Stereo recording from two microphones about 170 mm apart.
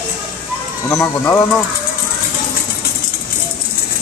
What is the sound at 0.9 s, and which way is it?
Speech, 15° left (ahead or behind).